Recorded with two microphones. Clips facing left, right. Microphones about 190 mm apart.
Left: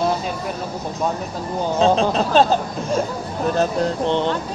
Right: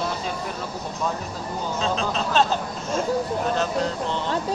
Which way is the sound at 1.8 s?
35° left (ahead or behind).